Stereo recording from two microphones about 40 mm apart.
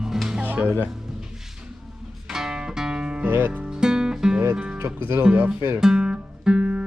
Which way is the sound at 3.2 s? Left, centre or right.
Right.